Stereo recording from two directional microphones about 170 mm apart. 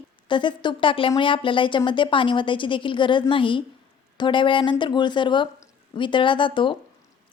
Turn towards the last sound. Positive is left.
turn(degrees=30)  # may be behind; listen again after turning